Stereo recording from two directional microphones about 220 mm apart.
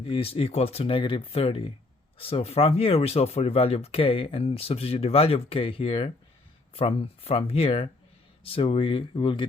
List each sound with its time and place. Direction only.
0.0 s speech: 25° left (ahead or behind)